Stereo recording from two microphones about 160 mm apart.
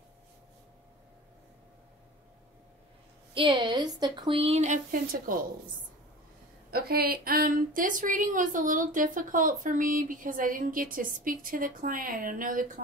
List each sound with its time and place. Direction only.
3.3 s speech: 30° right (ahead or behind)
5.3 s speech: 60° right (ahead or behind)
6.7 s speech: 70° right (ahead or behind); by 12.8 s 55° right (ahead or behind)